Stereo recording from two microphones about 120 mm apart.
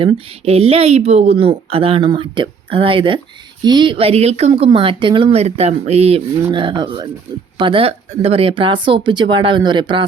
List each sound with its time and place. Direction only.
0.0 s a woman's voice: 55° right (ahead or behind)